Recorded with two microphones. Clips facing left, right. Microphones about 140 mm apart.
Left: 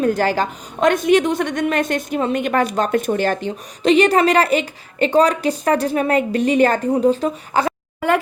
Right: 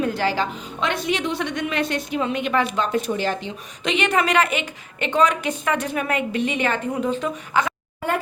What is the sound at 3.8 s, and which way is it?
A woman's voice, 35° left (ahead or behind).